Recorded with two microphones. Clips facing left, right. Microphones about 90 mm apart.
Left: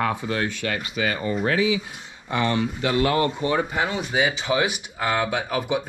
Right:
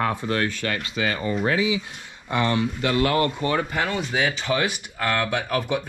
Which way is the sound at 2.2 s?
20° left (ahead or behind).